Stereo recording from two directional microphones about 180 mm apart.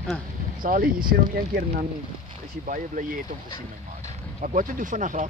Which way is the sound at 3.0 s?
45° right (ahead or behind).